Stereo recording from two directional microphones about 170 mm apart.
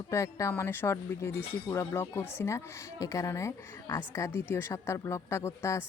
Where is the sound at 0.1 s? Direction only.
15° left (ahead or behind).